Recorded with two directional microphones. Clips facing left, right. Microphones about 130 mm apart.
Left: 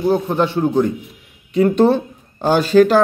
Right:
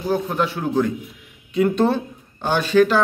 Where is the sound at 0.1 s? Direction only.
25° left (ahead or behind).